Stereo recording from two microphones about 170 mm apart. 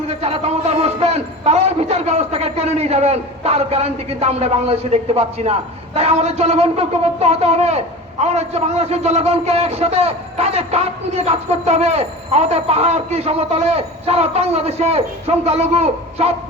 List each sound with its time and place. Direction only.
0.1 s a man's voice: 35° right (ahead or behind)